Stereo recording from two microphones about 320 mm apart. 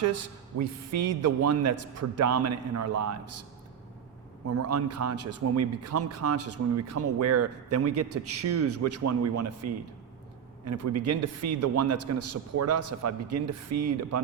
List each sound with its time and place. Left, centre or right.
0.6 s a man's voice: right
4.4 s a man's voice: right